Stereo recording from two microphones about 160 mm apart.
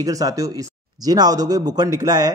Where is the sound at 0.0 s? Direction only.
20° right (ahead or behind).